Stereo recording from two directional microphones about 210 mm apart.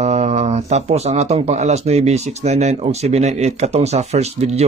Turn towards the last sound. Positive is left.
turn(degrees=-30)  # may be behind; listen again after turning